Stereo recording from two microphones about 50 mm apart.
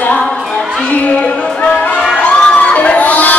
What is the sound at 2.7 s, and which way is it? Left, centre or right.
Music, left.